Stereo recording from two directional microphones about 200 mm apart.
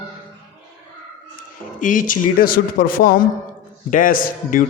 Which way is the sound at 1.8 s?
40° left (ahead or behind).